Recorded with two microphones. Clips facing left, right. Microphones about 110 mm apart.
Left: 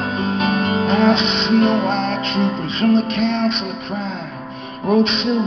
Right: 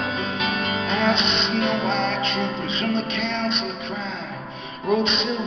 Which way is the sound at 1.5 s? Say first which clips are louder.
Left 9 dB; 35° left (ahead or behind).